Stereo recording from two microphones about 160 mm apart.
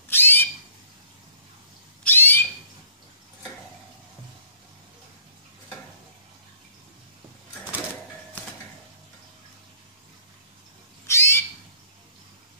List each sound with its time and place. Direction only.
0.1 s bird: 15° left (ahead or behind)
2.0 s owl: 15° left (ahead or behind)
11.1 s owl: 15° left (ahead or behind)